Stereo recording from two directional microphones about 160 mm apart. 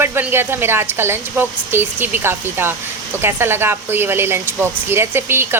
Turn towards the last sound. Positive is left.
turn(degrees=-15)  # may be behind; listen again after turning